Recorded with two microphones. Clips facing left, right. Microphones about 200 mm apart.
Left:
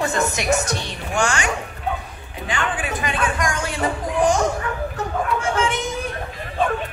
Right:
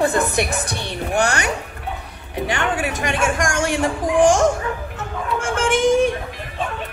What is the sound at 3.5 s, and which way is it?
Speech, 90° right.